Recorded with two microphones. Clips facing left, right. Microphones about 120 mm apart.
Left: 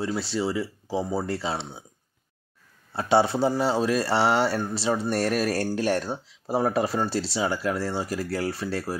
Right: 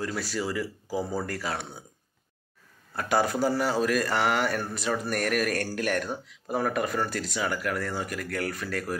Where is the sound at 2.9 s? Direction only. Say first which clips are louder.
Left 4 dB; 30° left (ahead or behind).